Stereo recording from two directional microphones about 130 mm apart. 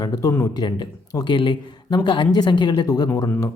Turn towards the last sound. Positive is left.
turn(degrees=30)  # may be behind; listen again after turning